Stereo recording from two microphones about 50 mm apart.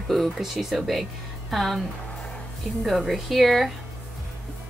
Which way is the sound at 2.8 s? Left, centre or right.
Centre.